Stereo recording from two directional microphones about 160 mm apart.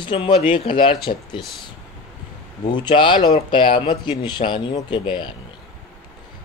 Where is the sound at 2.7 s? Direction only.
30° left (ahead or behind).